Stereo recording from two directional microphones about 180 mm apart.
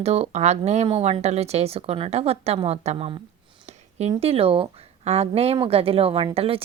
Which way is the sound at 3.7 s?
40° right (ahead or behind).